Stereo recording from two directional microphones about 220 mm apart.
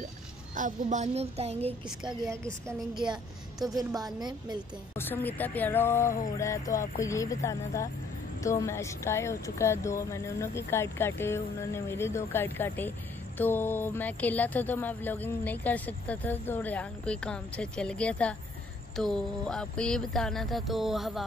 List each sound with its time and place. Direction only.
0.6 s a child's voice: 35° right (ahead or behind)
3.7 s a child's voice: 15° right (ahead or behind)
4.9 s speech: 10° left (ahead or behind)
18.9 s a sound: 5° left (ahead or behind)